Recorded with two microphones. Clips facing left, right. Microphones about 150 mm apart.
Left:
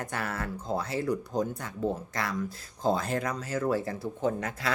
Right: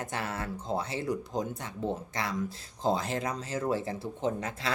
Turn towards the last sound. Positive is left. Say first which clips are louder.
# left 2 dB
turn(degrees=-25)  # may be behind; listen again after turning